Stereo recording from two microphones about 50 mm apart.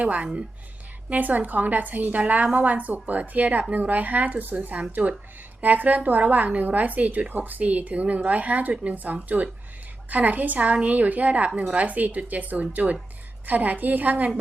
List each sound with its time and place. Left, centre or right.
0.0 s a woman's voice: right